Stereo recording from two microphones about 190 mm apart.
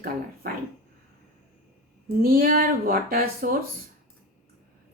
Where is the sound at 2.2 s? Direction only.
50° right (ahead or behind).